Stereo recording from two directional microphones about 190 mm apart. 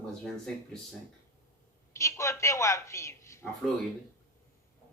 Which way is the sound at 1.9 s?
15° left (ahead or behind).